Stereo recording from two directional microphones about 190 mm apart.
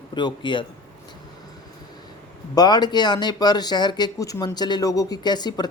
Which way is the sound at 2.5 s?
20° left (ahead or behind).